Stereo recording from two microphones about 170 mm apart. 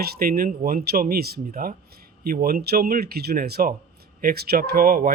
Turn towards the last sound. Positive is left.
turn(degrees=-60)  # may be behind; listen again after turning